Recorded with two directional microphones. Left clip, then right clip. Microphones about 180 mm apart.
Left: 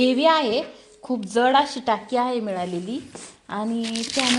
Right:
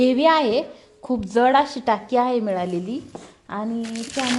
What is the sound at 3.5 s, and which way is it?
Speech, 10° left (ahead or behind).